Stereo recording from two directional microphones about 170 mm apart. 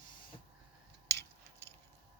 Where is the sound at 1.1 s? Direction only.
90° right.